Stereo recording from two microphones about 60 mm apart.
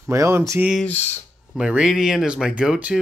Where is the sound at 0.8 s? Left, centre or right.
Left.